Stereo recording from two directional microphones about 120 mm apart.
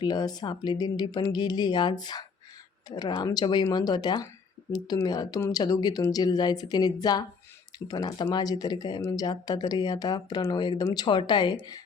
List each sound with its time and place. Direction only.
0.0 s speech: 35° left (ahead or behind)
3.4 s speech: 35° left (ahead or behind)